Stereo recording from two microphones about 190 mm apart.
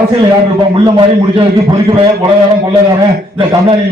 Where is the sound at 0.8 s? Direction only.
25° right (ahead or behind).